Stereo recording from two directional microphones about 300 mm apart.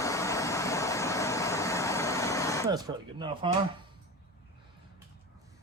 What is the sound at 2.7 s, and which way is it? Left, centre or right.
Speech, centre.